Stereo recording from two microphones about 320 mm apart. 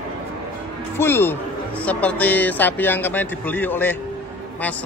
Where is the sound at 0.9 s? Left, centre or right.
Centre.